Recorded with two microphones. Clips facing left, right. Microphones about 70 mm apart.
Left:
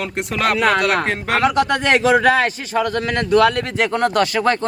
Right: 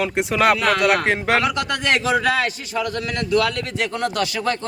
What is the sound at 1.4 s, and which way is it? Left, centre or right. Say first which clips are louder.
A man's voice: left 5 dB; left.